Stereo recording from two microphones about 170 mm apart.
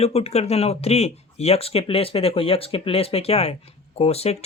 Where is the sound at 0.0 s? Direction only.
35° left (ahead or behind).